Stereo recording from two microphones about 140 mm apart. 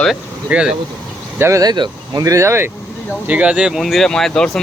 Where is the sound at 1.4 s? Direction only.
20° right (ahead or behind).